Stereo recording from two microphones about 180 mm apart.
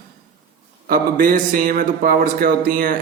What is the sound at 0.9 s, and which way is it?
A man's voice, 50° right (ahead or behind).